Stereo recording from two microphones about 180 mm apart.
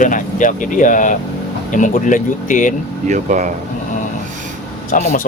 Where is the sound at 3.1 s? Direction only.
45° right (ahead or behind).